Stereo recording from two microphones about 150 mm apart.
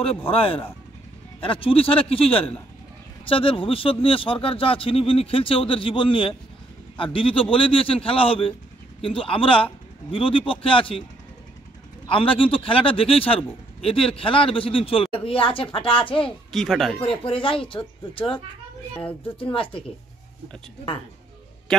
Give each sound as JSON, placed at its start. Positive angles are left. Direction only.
{"t": 0.3, "sound": "a man's voice", "side_deg": 40}
{"t": 12.1, "sound": "a man's voice", "side_deg": 35}
{"t": 16.5, "sound": "speech", "side_deg": 0}
{"t": 17.2, "sound": "a man's voice", "side_deg": 35}
{"t": 19.4, "sound": "a man's voice", "side_deg": 35}